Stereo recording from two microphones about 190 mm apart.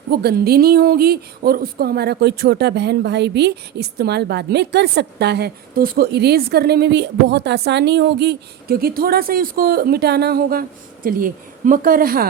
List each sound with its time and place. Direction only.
0.1 s speech: 55° right (ahead or behind)